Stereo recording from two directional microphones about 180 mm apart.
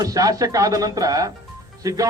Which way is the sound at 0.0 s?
20° right (ahead or behind).